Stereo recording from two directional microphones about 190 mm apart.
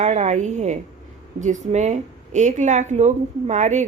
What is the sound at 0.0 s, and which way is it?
Speech, 35° right (ahead or behind).